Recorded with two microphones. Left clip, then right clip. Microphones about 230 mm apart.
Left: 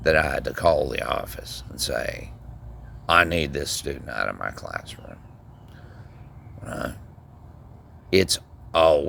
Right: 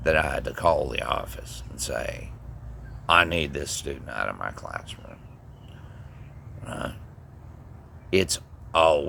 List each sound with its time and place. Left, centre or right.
0.0 s speech: left
6.7 s speech: left
8.1 s speech: left